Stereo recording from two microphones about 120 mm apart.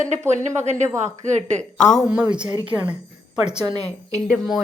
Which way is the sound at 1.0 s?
75° right (ahead or behind).